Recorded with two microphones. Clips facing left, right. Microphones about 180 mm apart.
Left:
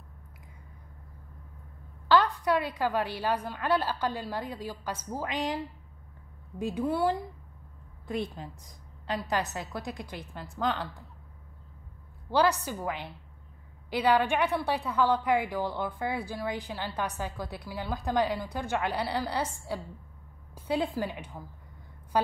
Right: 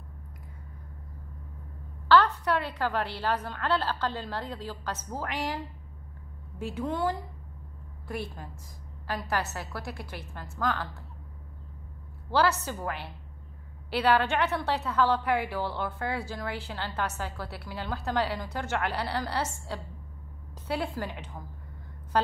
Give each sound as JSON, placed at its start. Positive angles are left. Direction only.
{"t": 2.0, "sound": "a woman's voice", "side_deg": 15}
{"t": 6.6, "sound": "a woman's voice", "side_deg": 10}
{"t": 12.3, "sound": "a woman's voice", "side_deg": 15}
{"t": 22.1, "sound": "a sound", "side_deg": 10}